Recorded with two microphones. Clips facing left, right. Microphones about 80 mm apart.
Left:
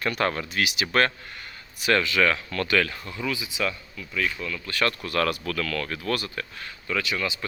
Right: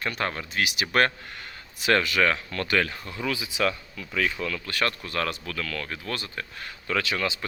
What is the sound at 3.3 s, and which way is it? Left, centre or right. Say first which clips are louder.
Speech: right 2 dB; right.